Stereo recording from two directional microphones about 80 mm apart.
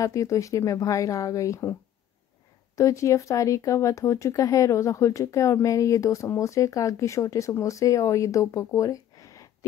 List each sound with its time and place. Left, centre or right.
0.0 s a woman's voice: left